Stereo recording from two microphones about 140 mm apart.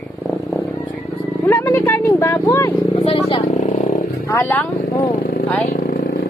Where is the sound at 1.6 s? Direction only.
15° left (ahead or behind).